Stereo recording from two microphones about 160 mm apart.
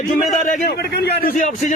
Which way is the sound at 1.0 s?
80° left.